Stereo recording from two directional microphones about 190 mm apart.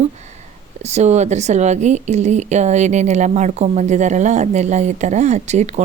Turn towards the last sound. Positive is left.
turn(degrees=-35)  # may be behind; listen again after turning